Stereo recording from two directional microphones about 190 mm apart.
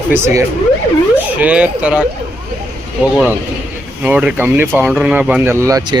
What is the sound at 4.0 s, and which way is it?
A man's voice, 5° right (ahead or behind).